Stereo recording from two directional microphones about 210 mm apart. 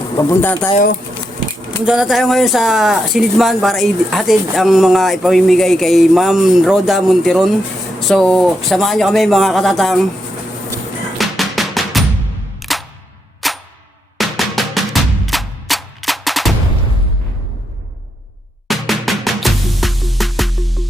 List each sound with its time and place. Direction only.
0.2 s speech: 10° left (ahead or behind)
1.8 s speech: 5° right (ahead or behind)
11.2 s music: centre (ahead or behind)
12.5 s single-lens reflex camera: centre (ahead or behind)
13.4 s a sound: centre (ahead or behind)
14.2 s drum: centre (ahead or behind)
18.7 s music: centre (ahead or behind)